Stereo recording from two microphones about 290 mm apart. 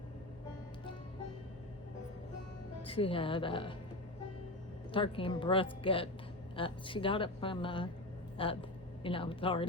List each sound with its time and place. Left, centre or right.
2.8 s speech: centre
4.9 s speech: centre